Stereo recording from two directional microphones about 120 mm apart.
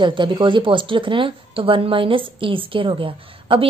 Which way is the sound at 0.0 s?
40° right (ahead or behind).